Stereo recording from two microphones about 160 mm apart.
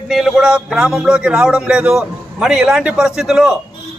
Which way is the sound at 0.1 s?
Centre (ahead or behind).